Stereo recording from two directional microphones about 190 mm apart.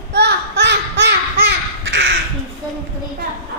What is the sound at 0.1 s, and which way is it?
Crow, 60° right (ahead or behind).